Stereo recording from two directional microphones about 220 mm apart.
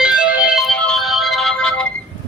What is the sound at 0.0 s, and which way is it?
Music, 5° right (ahead or behind).